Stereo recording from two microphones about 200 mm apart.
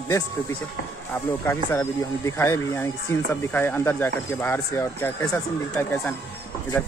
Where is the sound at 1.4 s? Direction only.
10° left (ahead or behind).